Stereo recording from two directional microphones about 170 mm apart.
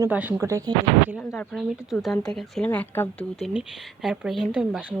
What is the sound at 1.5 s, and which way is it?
Speech, centre (ahead or behind).